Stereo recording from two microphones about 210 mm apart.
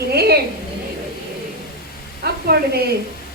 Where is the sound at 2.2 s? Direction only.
50° right (ahead or behind).